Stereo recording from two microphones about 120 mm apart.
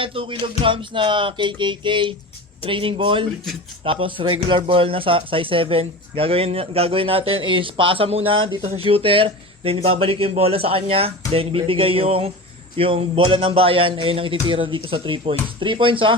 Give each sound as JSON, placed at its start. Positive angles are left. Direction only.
{"t": 0.0, "sound": "speech", "side_deg": -50}